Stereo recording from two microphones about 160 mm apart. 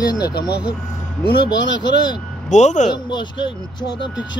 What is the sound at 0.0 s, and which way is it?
Speech, 25° left (ahead or behind).